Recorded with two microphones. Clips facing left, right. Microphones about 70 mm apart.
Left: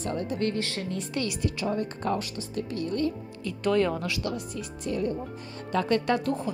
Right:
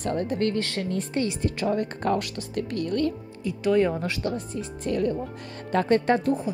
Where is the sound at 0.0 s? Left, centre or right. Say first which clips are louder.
Right 3 dB; right.